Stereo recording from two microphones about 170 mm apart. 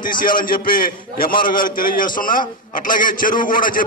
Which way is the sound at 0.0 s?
55° left (ahead or behind).